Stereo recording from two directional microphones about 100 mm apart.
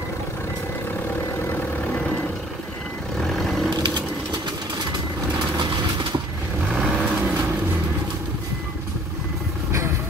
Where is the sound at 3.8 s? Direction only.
50° right (ahead or behind).